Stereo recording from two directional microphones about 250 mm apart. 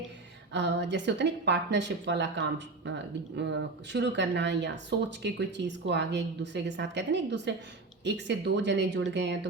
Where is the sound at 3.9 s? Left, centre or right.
Right.